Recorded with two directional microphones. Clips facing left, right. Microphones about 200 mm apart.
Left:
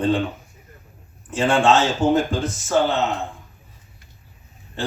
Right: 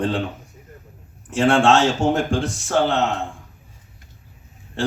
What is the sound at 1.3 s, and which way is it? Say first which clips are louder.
Speech: right 2 dB; 80° right.